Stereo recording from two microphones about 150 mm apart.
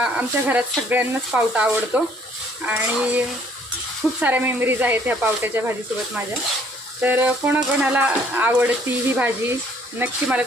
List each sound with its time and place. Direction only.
0.0 s speech: 10° right (ahead or behind)
7.0 s speech: 10° right (ahead or behind)